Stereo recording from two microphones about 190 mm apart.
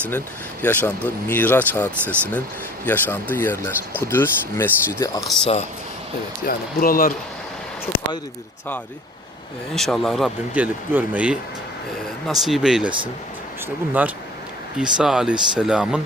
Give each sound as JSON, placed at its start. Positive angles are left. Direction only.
{"t": 0.6, "sound": "speech", "side_deg": 10}
{"t": 5.2, "sound": "speech", "side_deg": 0}
{"t": 6.4, "sound": "speech", "side_deg": 50}
{"t": 9.7, "sound": "speech", "side_deg": 0}
{"t": 14.8, "sound": "speech", "side_deg": -5}